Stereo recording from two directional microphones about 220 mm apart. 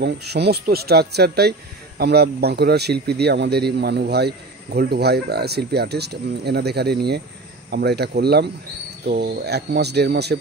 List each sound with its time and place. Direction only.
0.0 s speech: 50° right (ahead or behind)